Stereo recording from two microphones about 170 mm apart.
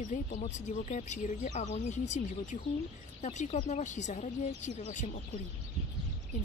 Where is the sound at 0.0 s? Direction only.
45° left (ahead or behind).